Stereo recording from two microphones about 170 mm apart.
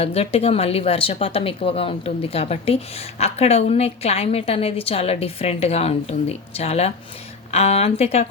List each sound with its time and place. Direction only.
0.0 s speech: 35° left (ahead or behind)